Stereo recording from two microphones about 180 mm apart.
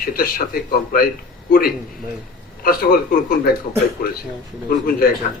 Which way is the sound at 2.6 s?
55° left (ahead or behind).